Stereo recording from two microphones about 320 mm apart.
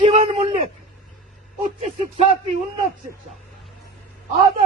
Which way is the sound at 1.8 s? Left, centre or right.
Centre.